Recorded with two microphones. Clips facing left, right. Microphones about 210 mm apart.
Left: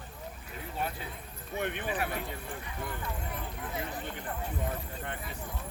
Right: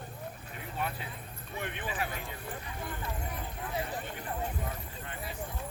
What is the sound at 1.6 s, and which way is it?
Speech, 60° left (ahead or behind).